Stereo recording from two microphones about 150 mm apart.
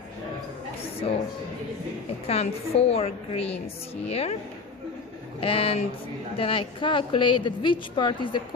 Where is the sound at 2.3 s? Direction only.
40° left (ahead or behind).